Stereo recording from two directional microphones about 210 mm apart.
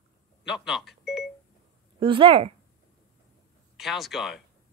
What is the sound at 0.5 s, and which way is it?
Speech, centre (ahead or behind).